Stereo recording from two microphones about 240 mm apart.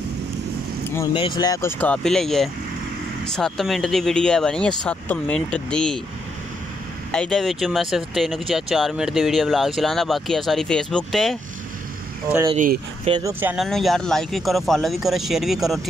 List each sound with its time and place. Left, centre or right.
0.9 s speech: centre
7.1 s speech: centre
12.4 s speech: right
13.1 s speech: centre